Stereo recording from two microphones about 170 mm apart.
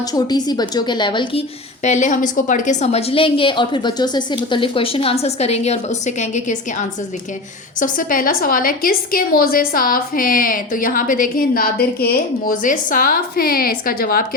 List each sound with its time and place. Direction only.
0.1 s a woman's voice: 25° left (ahead or behind); by 14.3 s 60° left (ahead or behind)